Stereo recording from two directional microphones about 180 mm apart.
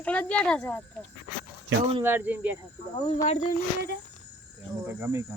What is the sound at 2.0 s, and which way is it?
Speech, 10° right (ahead or behind).